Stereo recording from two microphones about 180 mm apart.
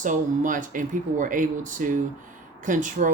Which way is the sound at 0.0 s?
45° right (ahead or behind).